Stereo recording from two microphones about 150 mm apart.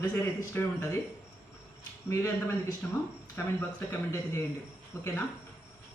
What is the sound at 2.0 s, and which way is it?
A man's voice, 20° left (ahead or behind).